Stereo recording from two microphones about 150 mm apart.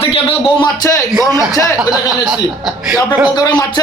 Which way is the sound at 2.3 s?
5° right (ahead or behind).